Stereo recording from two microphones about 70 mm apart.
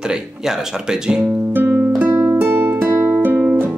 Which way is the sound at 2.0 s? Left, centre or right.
Right.